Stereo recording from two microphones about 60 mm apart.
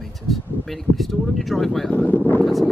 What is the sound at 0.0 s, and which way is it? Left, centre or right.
Speech, centre.